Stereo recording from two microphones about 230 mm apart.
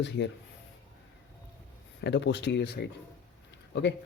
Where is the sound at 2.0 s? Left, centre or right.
Left.